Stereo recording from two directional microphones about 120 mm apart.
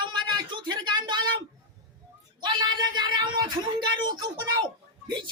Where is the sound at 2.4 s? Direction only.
35° right (ahead or behind).